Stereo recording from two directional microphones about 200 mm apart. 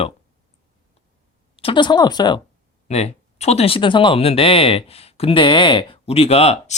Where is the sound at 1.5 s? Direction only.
25° left (ahead or behind).